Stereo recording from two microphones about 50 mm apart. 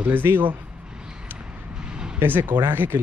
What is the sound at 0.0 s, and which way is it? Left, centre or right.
Speech, right.